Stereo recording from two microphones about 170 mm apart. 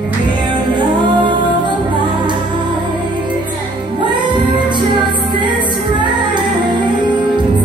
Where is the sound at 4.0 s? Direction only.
30° right (ahead or behind).